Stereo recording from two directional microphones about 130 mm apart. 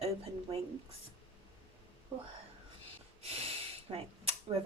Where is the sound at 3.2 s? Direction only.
50° right (ahead or behind).